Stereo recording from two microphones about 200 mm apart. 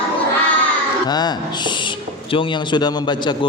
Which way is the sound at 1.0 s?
20° left (ahead or behind).